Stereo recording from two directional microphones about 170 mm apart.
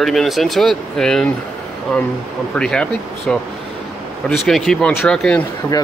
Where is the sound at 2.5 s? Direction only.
5° left (ahead or behind).